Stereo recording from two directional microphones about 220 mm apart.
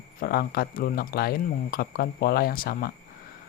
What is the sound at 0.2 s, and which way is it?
Speech, 45° left (ahead or behind).